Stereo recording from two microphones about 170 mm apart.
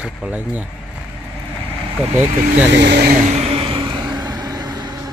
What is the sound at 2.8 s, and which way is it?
Speech, 70° right (ahead or behind).